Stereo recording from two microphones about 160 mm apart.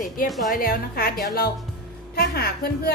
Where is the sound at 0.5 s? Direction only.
65° left (ahead or behind).